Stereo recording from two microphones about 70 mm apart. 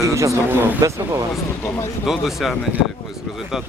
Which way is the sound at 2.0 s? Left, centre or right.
Centre.